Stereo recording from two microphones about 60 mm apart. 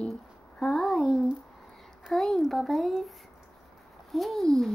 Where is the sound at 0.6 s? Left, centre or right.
Centre.